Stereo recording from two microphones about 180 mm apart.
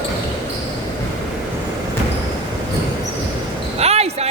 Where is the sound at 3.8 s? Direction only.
35° right (ahead or behind).